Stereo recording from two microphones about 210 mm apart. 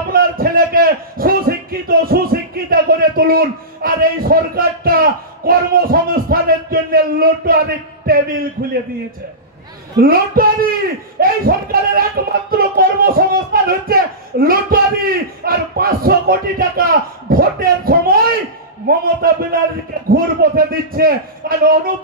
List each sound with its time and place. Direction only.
0.1 s a man's voice: 45° right (ahead or behind)
9.9 s speech: 45° right (ahead or behind)